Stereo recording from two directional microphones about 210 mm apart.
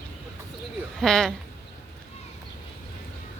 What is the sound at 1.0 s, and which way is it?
Speech, centre (ahead or behind).